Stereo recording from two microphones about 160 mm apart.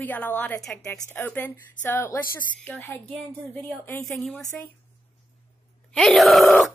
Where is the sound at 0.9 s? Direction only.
15° left (ahead or behind).